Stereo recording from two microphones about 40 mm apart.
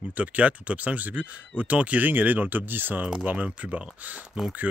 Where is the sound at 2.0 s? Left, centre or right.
Right.